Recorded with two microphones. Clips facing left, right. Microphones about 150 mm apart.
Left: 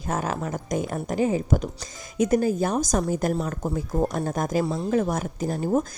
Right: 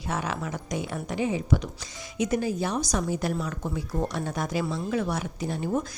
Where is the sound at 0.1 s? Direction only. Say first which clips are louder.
Left 3 dB; 45° left (ahead or behind).